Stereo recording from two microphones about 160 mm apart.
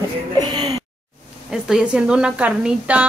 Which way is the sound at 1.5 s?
5° right (ahead or behind).